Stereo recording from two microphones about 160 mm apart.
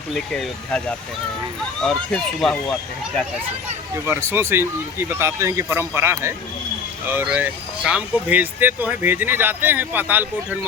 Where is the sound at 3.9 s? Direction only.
15° right (ahead or behind).